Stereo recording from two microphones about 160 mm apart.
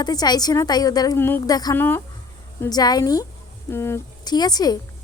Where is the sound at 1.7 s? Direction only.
15° left (ahead or behind).